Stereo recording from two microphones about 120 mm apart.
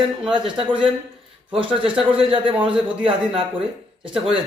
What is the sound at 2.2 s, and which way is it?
Speech, 50° right (ahead or behind).